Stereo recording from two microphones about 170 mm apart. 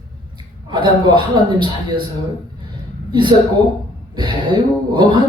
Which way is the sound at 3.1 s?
25° right (ahead or behind).